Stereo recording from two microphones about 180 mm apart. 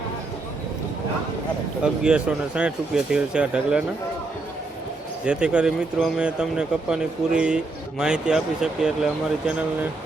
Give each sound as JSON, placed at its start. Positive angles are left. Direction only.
{"t": 1.8, "sound": "speech", "side_deg": -5}
{"t": 5.2, "sound": "speech", "side_deg": -5}